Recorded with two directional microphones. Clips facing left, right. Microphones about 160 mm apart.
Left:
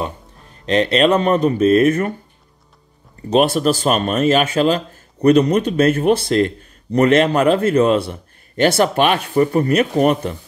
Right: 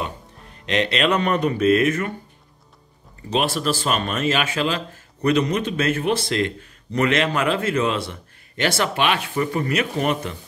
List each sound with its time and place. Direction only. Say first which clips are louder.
0.7 s speech: left 6 dB; 40° left (ahead or behind)
3.3 s speech: left 7 dB; 45° left (ahead or behind)